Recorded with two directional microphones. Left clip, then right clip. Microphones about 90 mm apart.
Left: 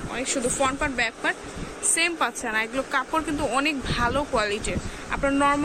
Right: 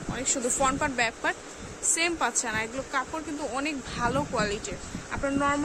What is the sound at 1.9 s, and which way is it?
Speech, 25° right (ahead or behind).